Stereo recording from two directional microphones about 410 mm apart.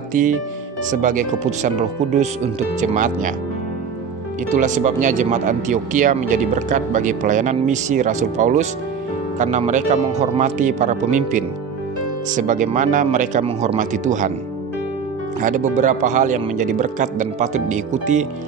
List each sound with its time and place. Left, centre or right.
0.1 s speech: centre
4.5 s speech: centre
15.4 s speech: centre